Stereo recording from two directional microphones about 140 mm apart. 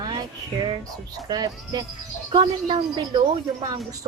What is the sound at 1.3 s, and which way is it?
A woman's voice, 30° right (ahead or behind).